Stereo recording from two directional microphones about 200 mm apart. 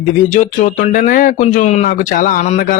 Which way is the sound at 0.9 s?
40° left (ahead or behind).